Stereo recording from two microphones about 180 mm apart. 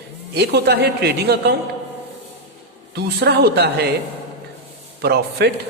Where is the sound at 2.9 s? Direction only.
65° right (ahead or behind).